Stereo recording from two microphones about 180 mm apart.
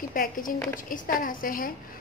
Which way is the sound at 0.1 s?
50° left (ahead or behind).